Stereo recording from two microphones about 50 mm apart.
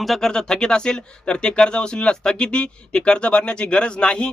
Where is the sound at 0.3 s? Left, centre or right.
Centre.